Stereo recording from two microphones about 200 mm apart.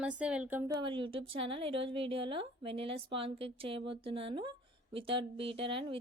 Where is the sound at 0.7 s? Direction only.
25° right (ahead or behind).